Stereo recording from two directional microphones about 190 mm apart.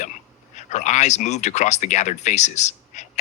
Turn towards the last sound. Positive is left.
turn(degrees=35)  # may be behind; listen again after turning